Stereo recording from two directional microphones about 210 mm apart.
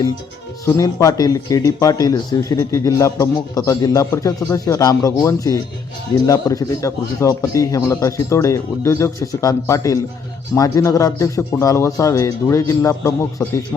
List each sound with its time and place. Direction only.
0.6 s speech: 15° left (ahead or behind)